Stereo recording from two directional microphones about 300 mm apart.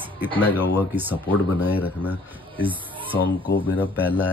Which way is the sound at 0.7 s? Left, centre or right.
Centre.